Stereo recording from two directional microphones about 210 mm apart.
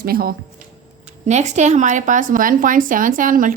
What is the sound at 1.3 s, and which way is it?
Speech, 35° right (ahead or behind).